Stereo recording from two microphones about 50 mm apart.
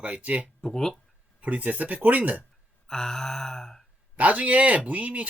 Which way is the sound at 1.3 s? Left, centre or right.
Right.